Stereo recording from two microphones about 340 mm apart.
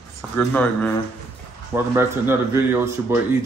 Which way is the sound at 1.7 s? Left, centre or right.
Centre.